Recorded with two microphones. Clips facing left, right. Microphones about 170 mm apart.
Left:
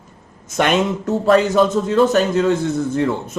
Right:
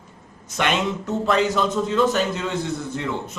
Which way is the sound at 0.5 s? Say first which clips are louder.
Left 6 dB; 45° left (ahead or behind).